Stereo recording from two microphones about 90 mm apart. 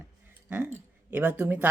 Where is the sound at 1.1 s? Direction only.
15° right (ahead or behind).